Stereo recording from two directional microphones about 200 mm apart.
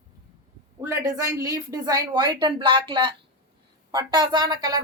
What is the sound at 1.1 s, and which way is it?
A woman's voice, 15° right (ahead or behind).